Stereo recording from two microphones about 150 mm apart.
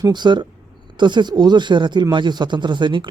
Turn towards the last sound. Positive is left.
turn(degrees=-30)  # may be behind; listen again after turning